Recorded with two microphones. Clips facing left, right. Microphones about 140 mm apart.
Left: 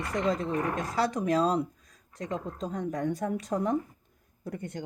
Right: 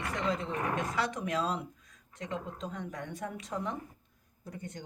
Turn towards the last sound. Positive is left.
turn(degrees=60)  # may be behind; listen again after turning